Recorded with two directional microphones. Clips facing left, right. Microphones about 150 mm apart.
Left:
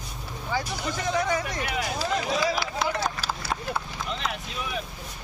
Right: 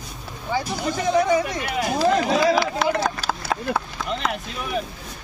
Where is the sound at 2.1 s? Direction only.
65° right (ahead or behind).